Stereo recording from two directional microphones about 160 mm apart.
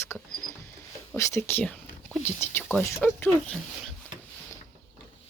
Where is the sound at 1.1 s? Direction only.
20° left (ahead or behind).